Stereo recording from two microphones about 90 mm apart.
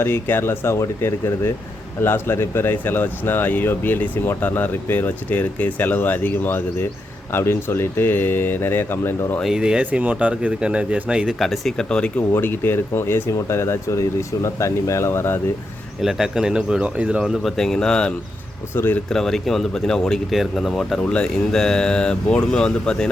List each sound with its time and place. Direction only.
0.0 s speech: 25° left (ahead or behind)
9.4 s speech: 5° right (ahead or behind); by 12.2 s 10° left (ahead or behind)
12.3 s speech: 25° left (ahead or behind)
16.0 s speech: 5° right (ahead or behind)
18.7 s speech: 25° left (ahead or behind)
19.1 s speech: 5° left (ahead or behind)